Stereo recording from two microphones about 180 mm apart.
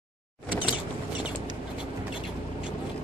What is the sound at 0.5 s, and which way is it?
Mechanisms, 25° left (ahead or behind).